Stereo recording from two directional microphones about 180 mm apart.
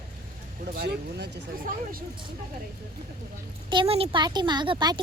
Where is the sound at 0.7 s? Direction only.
65° right (ahead or behind).